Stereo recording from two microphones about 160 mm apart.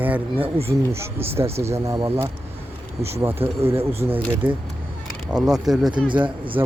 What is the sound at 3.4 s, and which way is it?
Speech, 15° right (ahead or behind).